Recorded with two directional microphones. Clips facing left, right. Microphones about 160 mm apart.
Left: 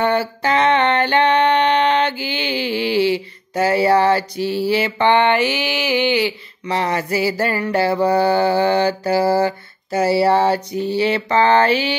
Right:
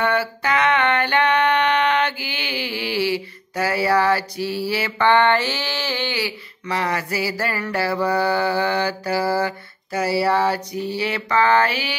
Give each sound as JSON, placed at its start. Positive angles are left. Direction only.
{"t": 0.0, "sound": "music", "side_deg": 30}